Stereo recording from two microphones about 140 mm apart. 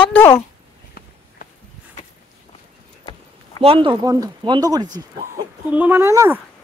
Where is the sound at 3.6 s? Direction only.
40° right (ahead or behind).